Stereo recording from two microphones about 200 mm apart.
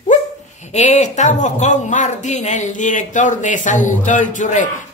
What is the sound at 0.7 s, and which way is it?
Speech, 35° left (ahead or behind).